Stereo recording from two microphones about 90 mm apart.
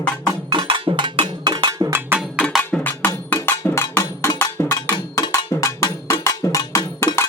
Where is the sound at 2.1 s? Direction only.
25° right (ahead or behind).